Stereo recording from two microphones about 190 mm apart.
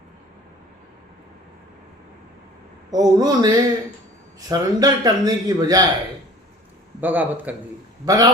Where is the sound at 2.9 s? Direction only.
20° right (ahead or behind).